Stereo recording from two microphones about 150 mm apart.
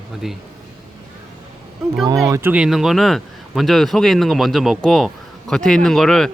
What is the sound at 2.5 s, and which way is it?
Speech, 5° right (ahead or behind).